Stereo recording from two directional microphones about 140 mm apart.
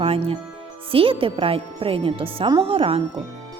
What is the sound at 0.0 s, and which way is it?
A woman's voice, 45° right (ahead or behind).